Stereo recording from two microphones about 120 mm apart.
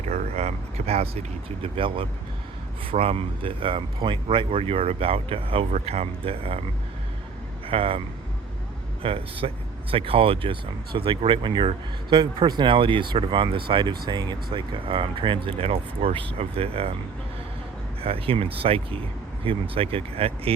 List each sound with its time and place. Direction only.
0.0 s speech: 65° right (ahead or behind)
7.7 s speech: 50° right (ahead or behind)
18.0 s speech: 55° right (ahead or behind)